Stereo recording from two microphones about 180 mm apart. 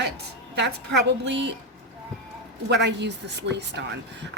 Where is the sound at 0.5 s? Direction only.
70° right (ahead or behind).